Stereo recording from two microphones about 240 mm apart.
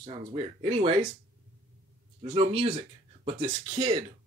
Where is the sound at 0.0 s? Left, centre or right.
Right.